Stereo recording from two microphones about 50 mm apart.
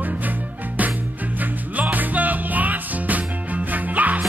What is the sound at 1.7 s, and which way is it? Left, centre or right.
Music, right.